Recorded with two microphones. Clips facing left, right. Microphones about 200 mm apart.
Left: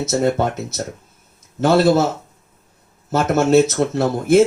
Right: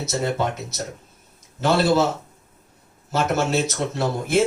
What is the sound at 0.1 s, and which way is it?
Speech, 50° left (ahead or behind).